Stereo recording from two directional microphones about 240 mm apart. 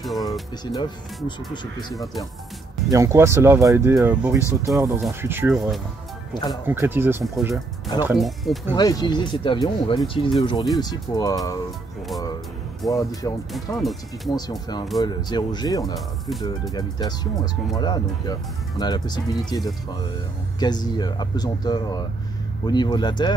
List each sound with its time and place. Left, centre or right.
0.2 s speech: centre
2.9 s speech: centre
6.3 s speech: centre
6.7 s speech: centre
8.7 s speech: centre
12.9 s speech: centre
13.7 s speech: centre
15.0 s speech: centre